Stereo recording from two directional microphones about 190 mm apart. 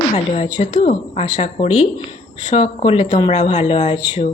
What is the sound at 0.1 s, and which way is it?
A woman's voice, 30° left (ahead or behind).